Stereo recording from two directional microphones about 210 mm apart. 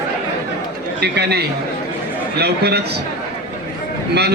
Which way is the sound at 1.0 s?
50° right (ahead or behind).